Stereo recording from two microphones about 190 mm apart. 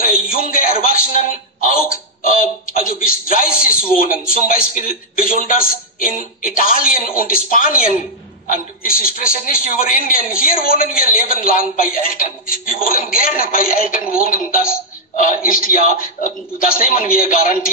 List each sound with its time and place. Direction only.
0.0 s a man's voice: 45° left (ahead or behind)